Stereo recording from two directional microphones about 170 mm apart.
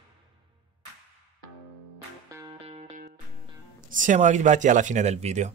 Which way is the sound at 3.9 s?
45° right (ahead or behind).